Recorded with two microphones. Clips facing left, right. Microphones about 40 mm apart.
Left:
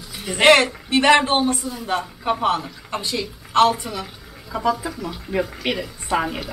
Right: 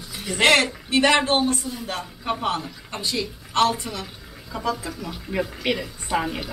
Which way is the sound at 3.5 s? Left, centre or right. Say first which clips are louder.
Left 4 dB; left.